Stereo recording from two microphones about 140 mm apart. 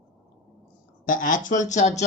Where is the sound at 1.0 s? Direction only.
70° left (ahead or behind).